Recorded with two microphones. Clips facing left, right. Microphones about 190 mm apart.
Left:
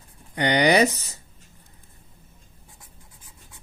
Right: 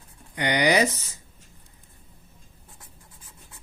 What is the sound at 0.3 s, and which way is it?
Speech, 35° left (ahead or behind).